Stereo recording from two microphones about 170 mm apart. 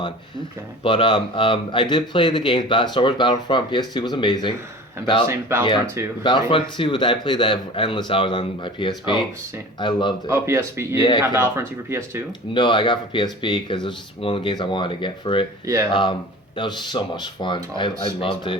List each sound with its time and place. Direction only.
0.9 s speech: 30° left (ahead or behind)
5.3 s speech: 15° right (ahead or behind)
6.2 s speech: 30° left (ahead or behind)
10.2 s speech: 15° right (ahead or behind)
12.5 s speech: 30° left (ahead or behind)
15.6 s speech: 20° right (ahead or behind)
15.9 s speech: 30° left (ahead or behind)